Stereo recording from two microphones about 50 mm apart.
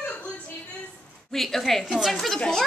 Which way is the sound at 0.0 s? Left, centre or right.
Left.